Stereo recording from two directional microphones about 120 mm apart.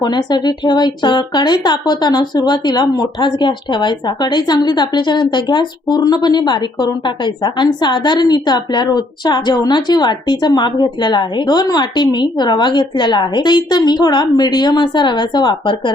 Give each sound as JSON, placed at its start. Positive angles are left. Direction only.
{"t": 0.0, "sound": "speech", "side_deg": 35}